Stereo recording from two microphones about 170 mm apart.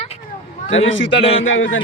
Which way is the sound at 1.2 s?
35° left (ahead or behind).